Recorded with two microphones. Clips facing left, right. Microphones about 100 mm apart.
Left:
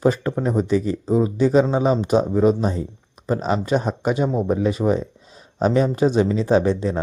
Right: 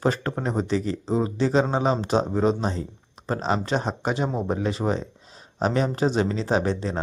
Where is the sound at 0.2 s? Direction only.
45° right (ahead or behind).